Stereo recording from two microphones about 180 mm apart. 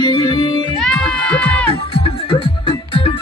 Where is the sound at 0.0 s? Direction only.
25° left (ahead or behind).